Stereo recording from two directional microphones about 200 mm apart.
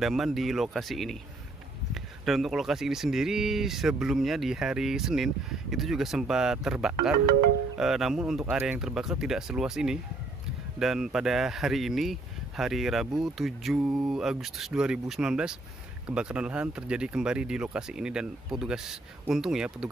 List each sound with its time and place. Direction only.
0.0 s speech: centre (ahead or behind)